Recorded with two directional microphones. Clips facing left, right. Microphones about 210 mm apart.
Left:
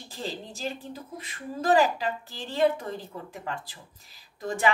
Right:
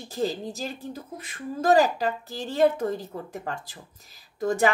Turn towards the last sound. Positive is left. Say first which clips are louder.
# right 5 dB
turn(degrees=-45)  # may be behind; listen again after turning